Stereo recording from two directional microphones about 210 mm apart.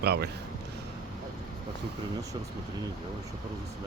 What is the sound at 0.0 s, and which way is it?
Speech, 50° right (ahead or behind).